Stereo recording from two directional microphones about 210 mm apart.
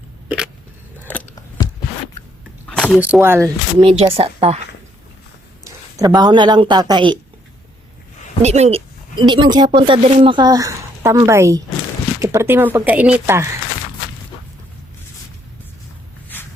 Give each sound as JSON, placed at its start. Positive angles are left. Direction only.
{"t": 0.3, "sound": "biting", "side_deg": -5}
{"t": 1.0, "sound": "scissors", "side_deg": 5}
{"t": 2.6, "sound": "a sound", "side_deg": 5}
{"t": 3.0, "sound": "speech", "side_deg": -10}
{"t": 3.8, "sound": "a woman's voice", "side_deg": -25}
{"t": 6.0, "sound": "a woman's voice", "side_deg": -20}
{"t": 8.4, "sound": "speech", "side_deg": -30}
{"t": 16.3, "sound": "a sound", "side_deg": 10}